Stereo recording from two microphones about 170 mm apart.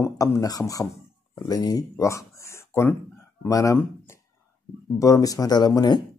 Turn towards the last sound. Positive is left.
turn(degrees=25)  # may be behind; listen again after turning